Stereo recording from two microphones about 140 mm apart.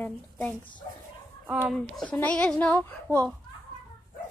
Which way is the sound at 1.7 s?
5° left (ahead or behind).